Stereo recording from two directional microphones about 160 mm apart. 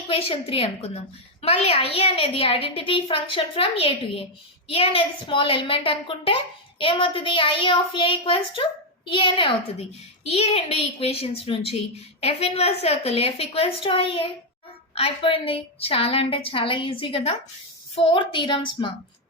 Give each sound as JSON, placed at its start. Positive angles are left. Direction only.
{"t": 0.1, "sound": "a woman's voice", "side_deg": 35}